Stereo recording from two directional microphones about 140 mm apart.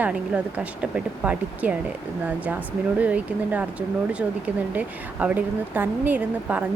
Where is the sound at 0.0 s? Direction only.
10° right (ahead or behind).